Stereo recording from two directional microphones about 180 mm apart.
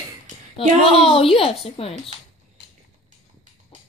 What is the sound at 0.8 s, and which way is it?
Speech, 30° left (ahead or behind).